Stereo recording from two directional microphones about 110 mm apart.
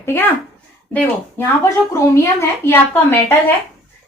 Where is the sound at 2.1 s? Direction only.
25° left (ahead or behind).